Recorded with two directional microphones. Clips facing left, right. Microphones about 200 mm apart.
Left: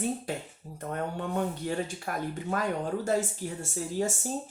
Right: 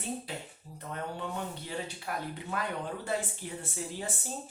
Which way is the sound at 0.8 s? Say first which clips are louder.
Left 5 dB; 50° left (ahead or behind).